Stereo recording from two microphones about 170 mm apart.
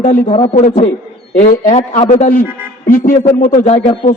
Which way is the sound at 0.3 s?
35° left (ahead or behind).